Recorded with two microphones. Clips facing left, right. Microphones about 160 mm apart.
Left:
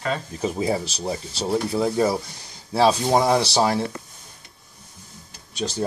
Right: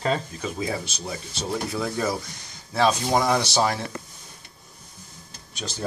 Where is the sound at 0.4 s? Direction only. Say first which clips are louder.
Left 5 dB; 35° left (ahead or behind).